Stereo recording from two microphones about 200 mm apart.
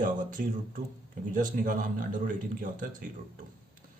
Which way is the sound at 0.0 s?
40° right (ahead or behind).